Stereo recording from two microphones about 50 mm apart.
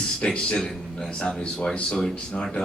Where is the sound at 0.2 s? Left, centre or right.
Left.